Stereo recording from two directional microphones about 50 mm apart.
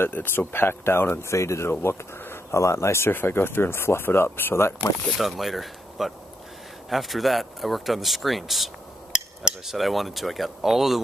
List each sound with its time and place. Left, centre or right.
0.0 s speech: left
1.3 s speech: left
1.7 s speech: left
2.5 s speech: left
5.1 s speech: centre
9.1 s cutlery: centre
9.8 s speech: centre